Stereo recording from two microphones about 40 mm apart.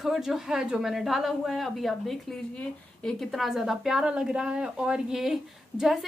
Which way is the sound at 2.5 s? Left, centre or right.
Centre.